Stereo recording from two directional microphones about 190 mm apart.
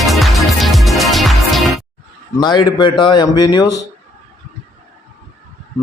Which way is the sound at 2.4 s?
25° left (ahead or behind).